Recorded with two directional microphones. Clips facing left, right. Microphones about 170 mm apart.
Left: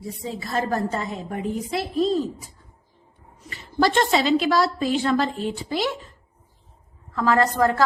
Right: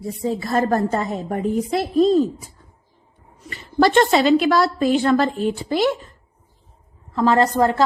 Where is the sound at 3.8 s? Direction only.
60° right (ahead or behind).